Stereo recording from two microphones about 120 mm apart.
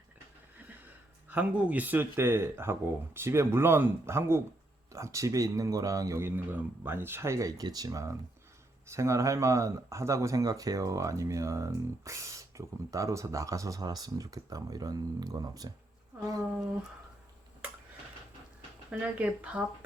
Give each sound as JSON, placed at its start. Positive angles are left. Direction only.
{"t": 1.3, "sound": "speech", "side_deg": -15}
{"t": 18.9, "sound": "speech", "side_deg": -10}